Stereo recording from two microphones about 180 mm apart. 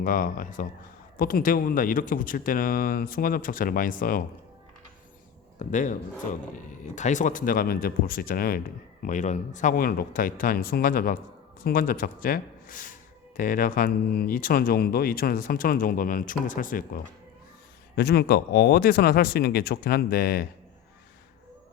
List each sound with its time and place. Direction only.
0.0 s speech: 45° left (ahead or behind)
5.5 s speech: 45° left (ahead or behind)
9.0 s speech: 45° left (ahead or behind)
17.9 s speech: 65° left (ahead or behind)